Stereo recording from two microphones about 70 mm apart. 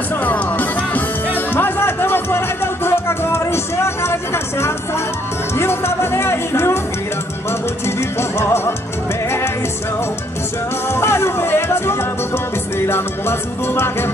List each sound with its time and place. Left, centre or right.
0.2 s music: left
7.8 s music: left
10.9 s music: left